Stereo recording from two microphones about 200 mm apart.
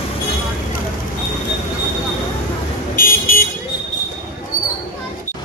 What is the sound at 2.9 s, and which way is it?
Vehicle, 45° left (ahead or behind).